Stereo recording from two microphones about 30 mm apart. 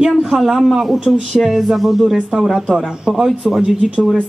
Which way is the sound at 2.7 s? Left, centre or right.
Centre.